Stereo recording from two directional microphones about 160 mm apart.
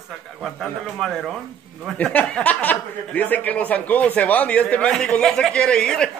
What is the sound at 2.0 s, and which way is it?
Speech, 5° left (ahead or behind).